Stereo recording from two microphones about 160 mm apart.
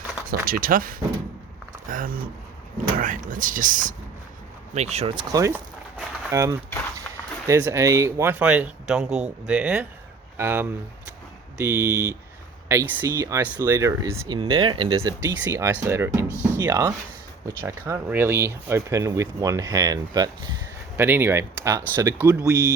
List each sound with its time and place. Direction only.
0.3 s speech: 60° right (ahead or behind)
4.7 s speech: 40° right (ahead or behind)
5.3 s speech: 20° right (ahead or behind)
20.9 s speech: 15° right (ahead or behind)